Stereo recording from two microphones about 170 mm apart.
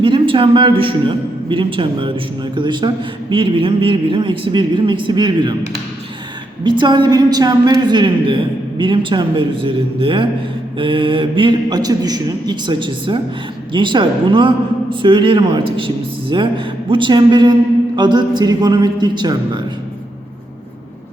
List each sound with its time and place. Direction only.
0.0 s a man's voice: 30° right (ahead or behind)
6.7 s a man's voice: 25° right (ahead or behind)